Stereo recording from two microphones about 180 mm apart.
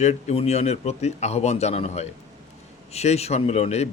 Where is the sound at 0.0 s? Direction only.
40° left (ahead or behind).